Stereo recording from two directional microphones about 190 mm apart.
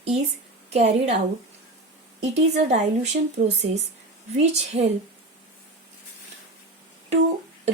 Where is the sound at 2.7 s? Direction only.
35° right (ahead or behind).